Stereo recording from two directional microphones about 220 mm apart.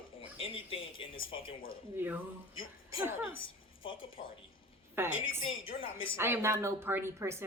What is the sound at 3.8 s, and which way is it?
Speech, 25° left (ahead or behind).